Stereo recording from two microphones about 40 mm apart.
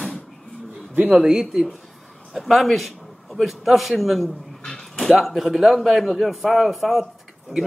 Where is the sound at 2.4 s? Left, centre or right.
Centre.